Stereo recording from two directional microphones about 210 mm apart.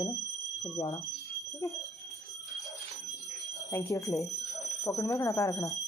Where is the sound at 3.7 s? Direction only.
15° left (ahead or behind).